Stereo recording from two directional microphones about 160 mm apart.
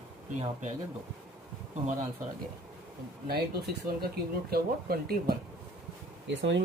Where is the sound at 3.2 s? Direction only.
80° right.